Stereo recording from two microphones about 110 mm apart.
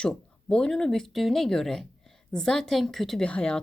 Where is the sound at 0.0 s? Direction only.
10° left (ahead or behind).